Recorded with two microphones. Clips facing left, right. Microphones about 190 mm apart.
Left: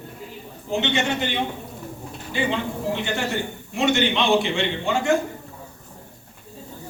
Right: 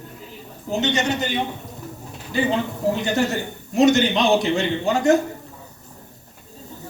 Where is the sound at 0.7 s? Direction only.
40° right (ahead or behind).